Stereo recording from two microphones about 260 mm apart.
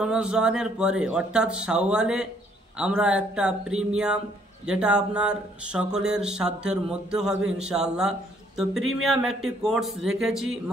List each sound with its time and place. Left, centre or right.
0.0 s speech: centre